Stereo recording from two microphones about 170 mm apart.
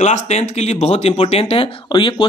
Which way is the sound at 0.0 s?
40° left (ahead or behind).